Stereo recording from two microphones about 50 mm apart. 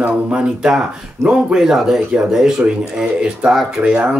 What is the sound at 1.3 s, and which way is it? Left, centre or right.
Speech, centre.